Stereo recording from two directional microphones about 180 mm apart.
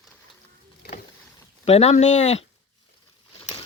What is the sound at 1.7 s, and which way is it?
Speech, 35° left (ahead or behind).